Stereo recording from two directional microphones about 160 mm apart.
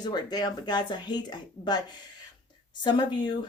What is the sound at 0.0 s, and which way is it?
Speech, 25° left (ahead or behind).